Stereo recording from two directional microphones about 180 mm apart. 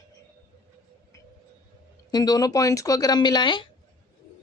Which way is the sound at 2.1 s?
20° left (ahead or behind).